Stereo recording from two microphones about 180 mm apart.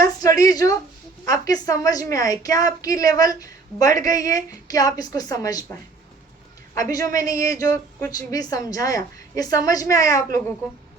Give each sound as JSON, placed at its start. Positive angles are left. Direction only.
{"t": 0.0, "sound": "a sound", "side_deg": 20}
{"t": 1.2, "sound": "a woman's voice", "side_deg": 20}
{"t": 6.7, "sound": "a woman's voice", "side_deg": 20}